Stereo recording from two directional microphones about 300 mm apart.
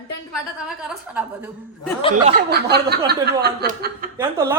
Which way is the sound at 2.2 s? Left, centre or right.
Right.